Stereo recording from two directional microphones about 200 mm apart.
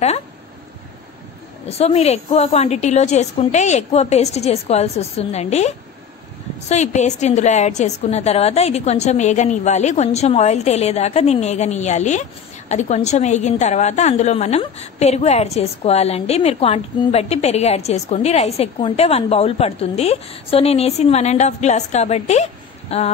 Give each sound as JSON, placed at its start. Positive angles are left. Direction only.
{"t": 1.7, "sound": "a woman's voice", "side_deg": 30}